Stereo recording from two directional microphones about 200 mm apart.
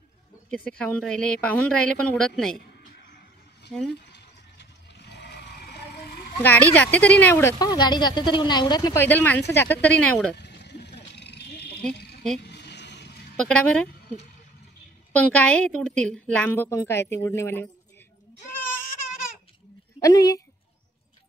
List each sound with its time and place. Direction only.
0.5 s a woman's voice: 5° left (ahead or behind)
3.9 s a sound: 55° left (ahead or behind)
6.4 s speech: 10° left (ahead or behind)
10.3 s a sound: 55° left (ahead or behind)
13.4 s a woman's voice: 5° left (ahead or behind)
15.1 s speech: 5° left (ahead or behind)
20.0 s speech: 15° left (ahead or behind)